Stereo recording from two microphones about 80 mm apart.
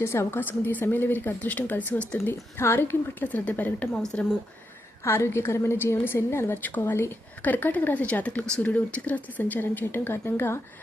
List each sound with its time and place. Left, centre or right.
0.0 s a woman's voice: left
3.9 s speech: centre
5.0 s a woman's voice: left